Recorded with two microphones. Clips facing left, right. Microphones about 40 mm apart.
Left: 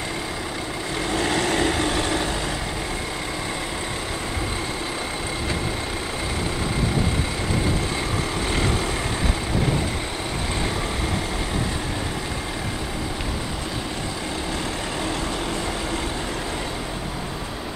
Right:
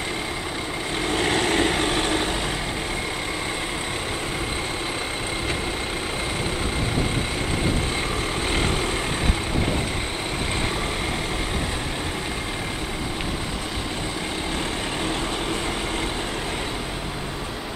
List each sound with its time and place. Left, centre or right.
1.1 s vehicle: right